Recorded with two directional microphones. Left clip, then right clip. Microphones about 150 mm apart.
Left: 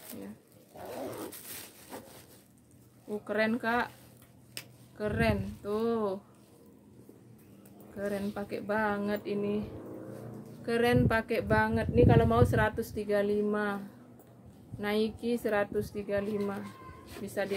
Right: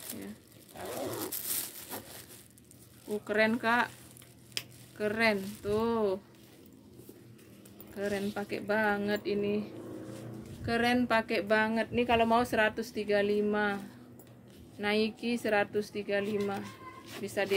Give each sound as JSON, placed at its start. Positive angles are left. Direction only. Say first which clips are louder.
{"t": 0.7, "sound": "zipper", "louder": "right 2 dB", "side_deg": -20}
{"t": 3.3, "sound": "speech", "louder": "right 2 dB", "side_deg": 10}
{"t": 4.9, "sound": "speech", "louder": "right 2 dB", "side_deg": 5}
{"t": 8.0, "sound": "speech", "louder": "right 1 dB", "side_deg": 5}
{"t": 14.8, "sound": "speech", "louder": "right 1 dB", "side_deg": 15}